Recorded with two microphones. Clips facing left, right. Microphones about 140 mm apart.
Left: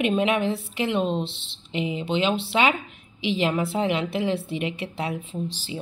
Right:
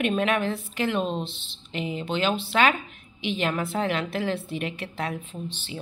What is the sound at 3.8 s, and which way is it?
Speech, 20° left (ahead or behind).